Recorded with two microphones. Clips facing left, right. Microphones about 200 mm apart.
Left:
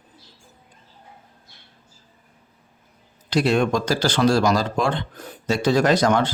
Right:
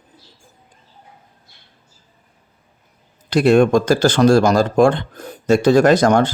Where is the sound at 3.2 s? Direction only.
50° right (ahead or behind).